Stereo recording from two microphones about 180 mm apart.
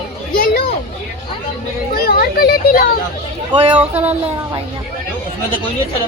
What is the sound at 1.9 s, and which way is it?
A child's voice, 55° left (ahead or behind).